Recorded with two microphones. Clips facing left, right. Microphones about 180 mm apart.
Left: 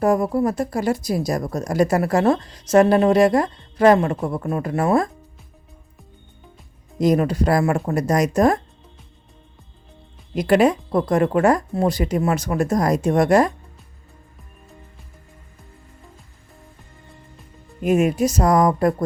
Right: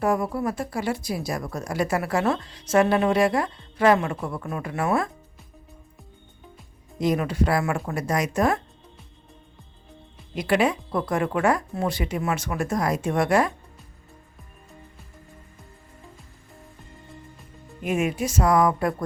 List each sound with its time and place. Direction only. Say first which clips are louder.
0.0 s speech: left 6 dB; 40° left (ahead or behind)
7.0 s speech: left 5 dB; 40° left (ahead or behind)
10.3 s speech: left 6 dB; 40° left (ahead or behind)
17.8 s speech: left 7 dB; 40° left (ahead or behind)